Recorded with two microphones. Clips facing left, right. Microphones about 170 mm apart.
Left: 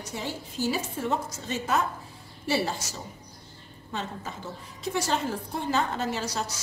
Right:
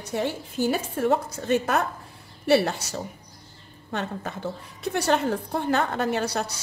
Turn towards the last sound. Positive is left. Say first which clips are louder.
# right 5 dB
turn(degrees=-60)  # may be behind; listen again after turning